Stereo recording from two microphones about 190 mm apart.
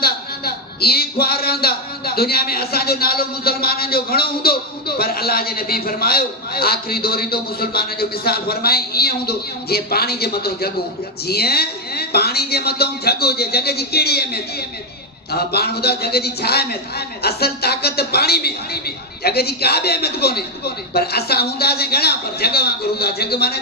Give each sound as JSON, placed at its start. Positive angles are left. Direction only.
{"t": 0.0, "sound": "a man's voice", "side_deg": 55}